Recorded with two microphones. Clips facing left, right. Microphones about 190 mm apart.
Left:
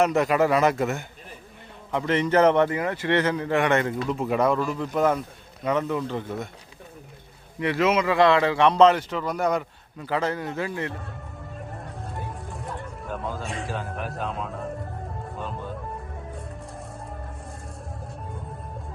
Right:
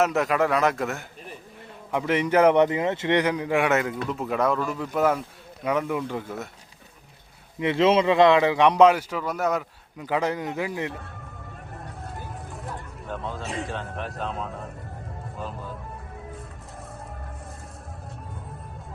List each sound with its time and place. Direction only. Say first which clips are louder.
0.0 s speech: left 2 dB; centre (ahead or behind)
1.9 s a man's voice: even; 10° right (ahead or behind)
7.6 s a man's voice: right 2 dB; 25° right (ahead or behind); by 9.6 s 5° right (ahead or behind)
10.0 s a man's voice: right 1 dB; 15° right (ahead or behind)
12.1 s vehicle: left 2 dB; centre (ahead or behind)
13.2 s speech: right 1 dB; centre (ahead or behind)